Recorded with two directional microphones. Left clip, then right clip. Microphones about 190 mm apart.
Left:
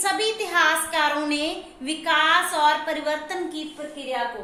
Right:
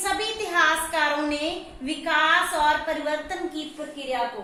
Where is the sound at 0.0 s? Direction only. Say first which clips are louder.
Left 3 dB; 45° left (ahead or behind).